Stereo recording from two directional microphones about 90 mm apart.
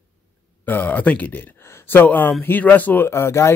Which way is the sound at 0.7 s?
20° left (ahead or behind).